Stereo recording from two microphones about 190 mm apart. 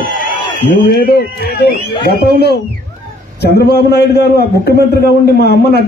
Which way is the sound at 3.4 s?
60° left (ahead or behind).